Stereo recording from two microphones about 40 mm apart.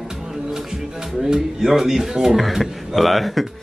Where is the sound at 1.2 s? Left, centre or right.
Centre.